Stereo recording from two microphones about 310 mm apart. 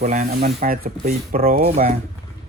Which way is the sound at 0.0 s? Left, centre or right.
Right.